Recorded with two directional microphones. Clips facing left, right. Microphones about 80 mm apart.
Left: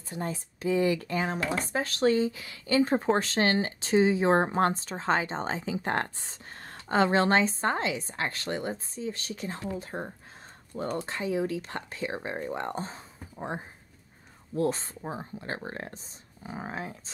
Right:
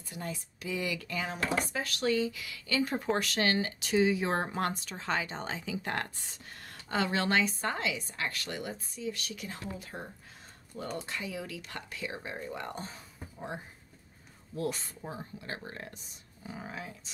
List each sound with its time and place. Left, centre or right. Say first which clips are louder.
0.1 s speech: left 6 dB; left